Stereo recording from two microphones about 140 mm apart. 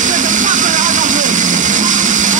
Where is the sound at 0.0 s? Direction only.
65° right (ahead or behind).